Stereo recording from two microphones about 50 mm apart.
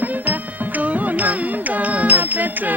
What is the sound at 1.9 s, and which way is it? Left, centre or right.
Music, right.